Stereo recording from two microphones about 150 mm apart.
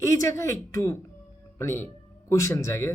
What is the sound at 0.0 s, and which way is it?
Speech, 20° left (ahead or behind).